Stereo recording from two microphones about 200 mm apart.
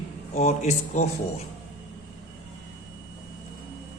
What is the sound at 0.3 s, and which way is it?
Speech, 35° left (ahead or behind).